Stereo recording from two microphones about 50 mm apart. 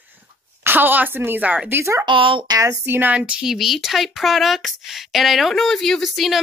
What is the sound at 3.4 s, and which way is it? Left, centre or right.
A woman's voice, centre.